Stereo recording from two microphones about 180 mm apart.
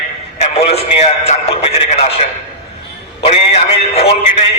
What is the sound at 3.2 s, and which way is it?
Speech, 35° left (ahead or behind).